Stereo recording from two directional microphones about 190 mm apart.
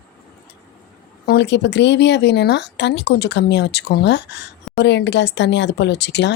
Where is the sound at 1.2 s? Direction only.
60° left (ahead or behind).